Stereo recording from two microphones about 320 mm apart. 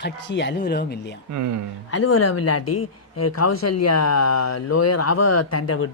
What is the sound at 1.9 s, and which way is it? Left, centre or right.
Speech, left.